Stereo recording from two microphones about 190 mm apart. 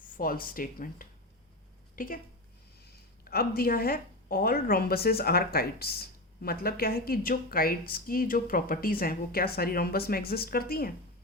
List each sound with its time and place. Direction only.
0.0 s speech: 50° left (ahead or behind)